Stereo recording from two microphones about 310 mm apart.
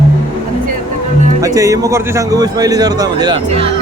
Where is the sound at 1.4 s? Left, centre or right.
Centre.